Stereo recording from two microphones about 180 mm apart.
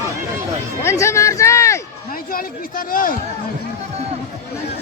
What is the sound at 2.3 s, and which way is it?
Speech, 55° left (ahead or behind).